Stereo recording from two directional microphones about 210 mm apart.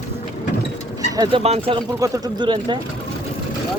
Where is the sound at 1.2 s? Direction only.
25° right (ahead or behind).